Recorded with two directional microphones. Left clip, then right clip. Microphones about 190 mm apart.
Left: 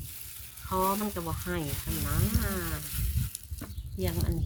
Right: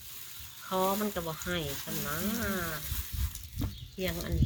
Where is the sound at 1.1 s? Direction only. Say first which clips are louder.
Even; 60° left (ahead or behind).